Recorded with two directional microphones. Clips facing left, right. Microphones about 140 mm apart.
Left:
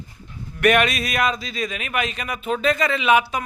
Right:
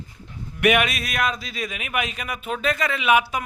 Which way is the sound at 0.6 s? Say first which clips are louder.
Left 2 dB; 10° right (ahead or behind).